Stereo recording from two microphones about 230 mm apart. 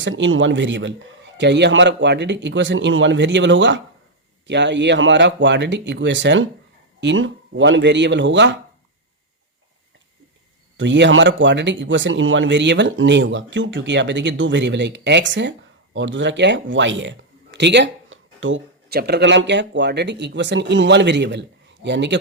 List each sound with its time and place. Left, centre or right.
0.0 s speech: right
10.8 s speech: right